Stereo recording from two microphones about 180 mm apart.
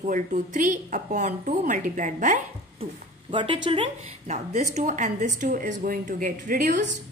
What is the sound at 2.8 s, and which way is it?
A woman's voice, 30° right (ahead or behind).